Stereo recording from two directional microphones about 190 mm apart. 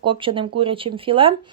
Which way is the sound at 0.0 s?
25° right (ahead or behind).